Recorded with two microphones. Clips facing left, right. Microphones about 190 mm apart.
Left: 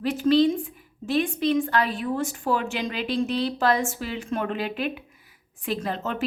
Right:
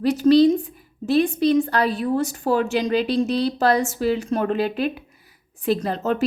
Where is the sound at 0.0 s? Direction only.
40° right (ahead or behind).